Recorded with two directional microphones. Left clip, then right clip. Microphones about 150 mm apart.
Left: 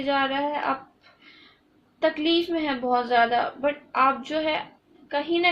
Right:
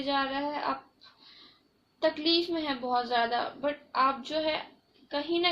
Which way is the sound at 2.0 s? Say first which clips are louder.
Left 4 dB; 35° left (ahead or behind).